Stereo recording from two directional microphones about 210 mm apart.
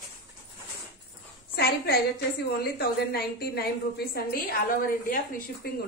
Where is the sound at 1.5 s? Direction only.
50° left (ahead or behind).